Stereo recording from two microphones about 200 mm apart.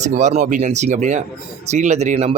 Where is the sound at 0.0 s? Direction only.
35° right (ahead or behind).